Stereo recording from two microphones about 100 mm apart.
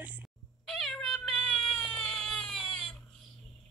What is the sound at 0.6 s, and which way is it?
Cat, 5° left (ahead or behind).